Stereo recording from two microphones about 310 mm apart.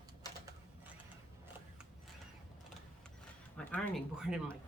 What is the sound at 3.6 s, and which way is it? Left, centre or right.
Speech, centre.